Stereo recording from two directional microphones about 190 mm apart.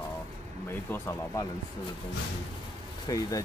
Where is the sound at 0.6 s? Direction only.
15° left (ahead or behind).